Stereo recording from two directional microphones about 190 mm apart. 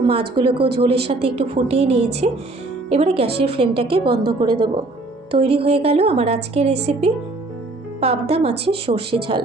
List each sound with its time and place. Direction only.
0.1 s a woman's voice: 25° right (ahead or behind)
4.0 s a woman's voice: 55° right (ahead or behind)
4.3 s a woman's voice: 25° right (ahead or behind)